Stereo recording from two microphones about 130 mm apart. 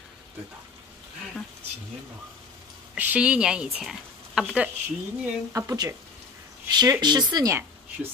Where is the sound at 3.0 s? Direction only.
10° right (ahead or behind).